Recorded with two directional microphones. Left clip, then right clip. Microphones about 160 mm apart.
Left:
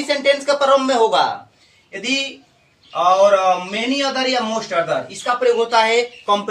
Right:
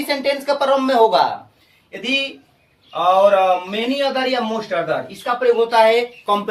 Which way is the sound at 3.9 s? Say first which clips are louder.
Even; 10° right (ahead or behind).